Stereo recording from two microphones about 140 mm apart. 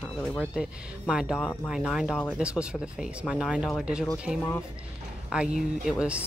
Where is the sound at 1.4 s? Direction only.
15° left (ahead or behind).